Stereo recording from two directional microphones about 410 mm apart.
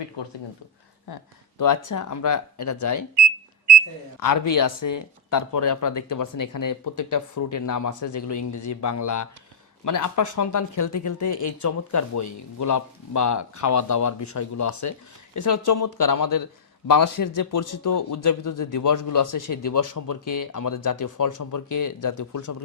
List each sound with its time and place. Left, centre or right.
0.2 s speech: left
1.0 s a man's voice: left
4.2 s a man's voice: left